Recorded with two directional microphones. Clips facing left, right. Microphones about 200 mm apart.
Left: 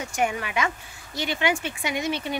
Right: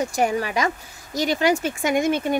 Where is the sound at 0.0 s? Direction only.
35° right (ahead or behind).